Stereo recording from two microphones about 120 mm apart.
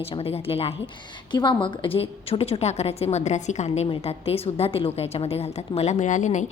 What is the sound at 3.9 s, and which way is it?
A woman's voice, 55° left (ahead or behind).